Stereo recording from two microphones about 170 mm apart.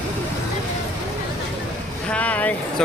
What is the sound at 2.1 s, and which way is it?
Speech, 10° left (ahead or behind).